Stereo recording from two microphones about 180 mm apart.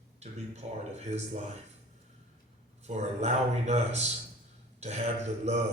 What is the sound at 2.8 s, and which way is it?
A man's voice, 40° right (ahead or behind).